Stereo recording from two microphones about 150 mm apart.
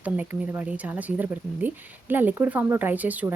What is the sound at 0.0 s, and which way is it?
Speech, 10° right (ahead or behind).